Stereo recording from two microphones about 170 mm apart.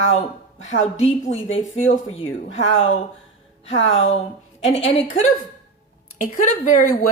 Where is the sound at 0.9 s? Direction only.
40° left (ahead or behind).